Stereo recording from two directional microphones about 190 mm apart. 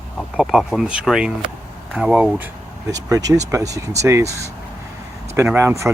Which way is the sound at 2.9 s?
15° right (ahead or behind).